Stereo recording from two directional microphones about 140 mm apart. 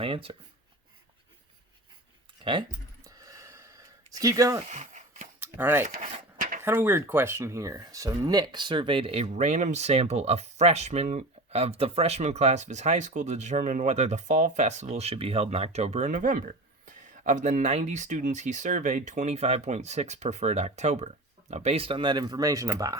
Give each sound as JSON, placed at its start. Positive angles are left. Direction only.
{"t": 0.0, "sound": "speech", "side_deg": -40}
{"t": 2.4, "sound": "speech", "side_deg": -35}
{"t": 3.2, "sound": "gasp", "side_deg": -25}
{"t": 4.6, "sound": "a sound", "side_deg": -55}
{"t": 5.4, "sound": "a sound", "side_deg": -15}
{"t": 6.0, "sound": "speech", "side_deg": -45}
{"t": 6.7, "sound": "speech", "side_deg": -15}